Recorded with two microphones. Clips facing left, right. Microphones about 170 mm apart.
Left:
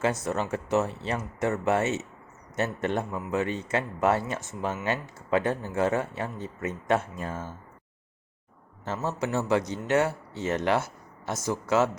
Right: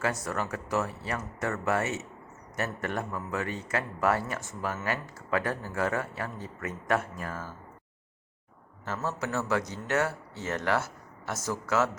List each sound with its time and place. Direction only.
0.0 s a man's voice: 20° left (ahead or behind)
8.8 s a man's voice: 25° left (ahead or behind)